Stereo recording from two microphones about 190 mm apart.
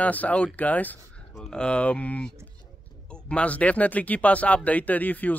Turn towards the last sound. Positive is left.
turn(degrees=10)  # may be behind; listen again after turning